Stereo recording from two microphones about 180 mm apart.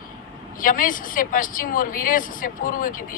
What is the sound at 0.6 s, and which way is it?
Speech, 50° left (ahead or behind).